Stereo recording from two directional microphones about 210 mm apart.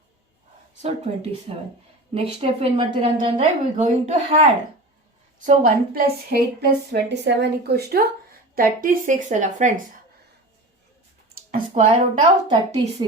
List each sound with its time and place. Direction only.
0.8 s a woman's voice: 30° right (ahead or behind)
11.5 s a sound: 30° right (ahead or behind)
12.5 s a woman's voice: 25° right (ahead or behind)